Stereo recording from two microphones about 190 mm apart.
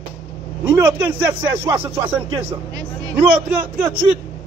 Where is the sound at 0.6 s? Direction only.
15° right (ahead or behind).